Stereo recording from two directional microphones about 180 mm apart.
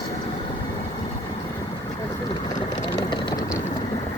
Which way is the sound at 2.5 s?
20° left (ahead or behind).